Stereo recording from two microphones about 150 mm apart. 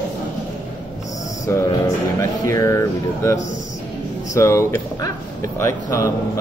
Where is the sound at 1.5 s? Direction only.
20° left (ahead or behind).